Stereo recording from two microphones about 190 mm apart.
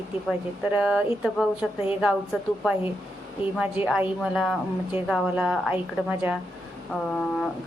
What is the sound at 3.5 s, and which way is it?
A woman's voice, 5° right (ahead or behind).